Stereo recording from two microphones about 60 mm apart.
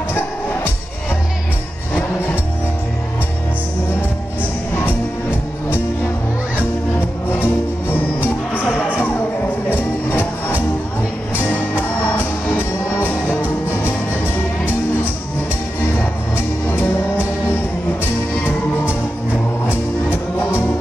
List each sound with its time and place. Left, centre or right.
7.2 s music: left
16.3 s music: left
19.7 s music: left